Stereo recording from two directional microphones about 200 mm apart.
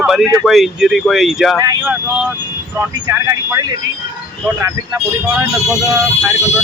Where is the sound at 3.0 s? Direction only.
15° right (ahead or behind).